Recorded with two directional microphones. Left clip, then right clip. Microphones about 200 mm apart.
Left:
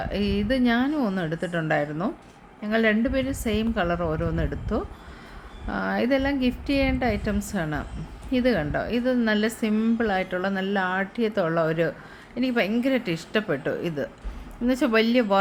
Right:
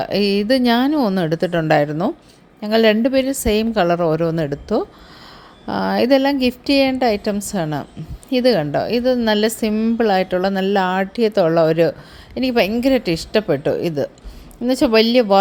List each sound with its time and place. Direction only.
0.0 s a woman's voice: 35° right (ahead or behind)